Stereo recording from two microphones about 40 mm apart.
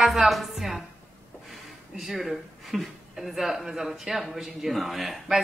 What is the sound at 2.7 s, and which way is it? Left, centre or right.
A woman's voice, centre.